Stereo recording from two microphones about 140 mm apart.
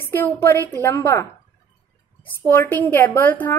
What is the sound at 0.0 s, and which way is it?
Speech, 15° left (ahead or behind).